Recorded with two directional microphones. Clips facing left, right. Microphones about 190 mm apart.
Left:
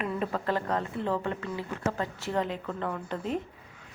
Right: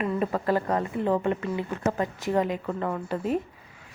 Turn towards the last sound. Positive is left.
turn(degrees=-5)  # may be behind; listen again after turning